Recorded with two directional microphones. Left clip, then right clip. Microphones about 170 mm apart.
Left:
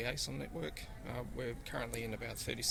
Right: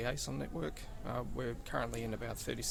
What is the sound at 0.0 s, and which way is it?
Speech, 40° right (ahead or behind).